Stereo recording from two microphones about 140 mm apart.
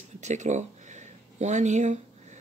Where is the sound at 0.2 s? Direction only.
55° right (ahead or behind).